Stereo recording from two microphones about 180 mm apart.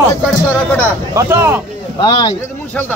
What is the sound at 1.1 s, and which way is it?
Speech, 15° right (ahead or behind).